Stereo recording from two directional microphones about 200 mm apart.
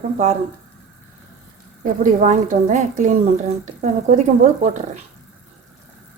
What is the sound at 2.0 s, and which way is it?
Speech, 40° right (ahead or behind).